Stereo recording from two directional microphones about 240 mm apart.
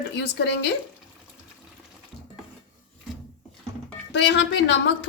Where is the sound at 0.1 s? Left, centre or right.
Left.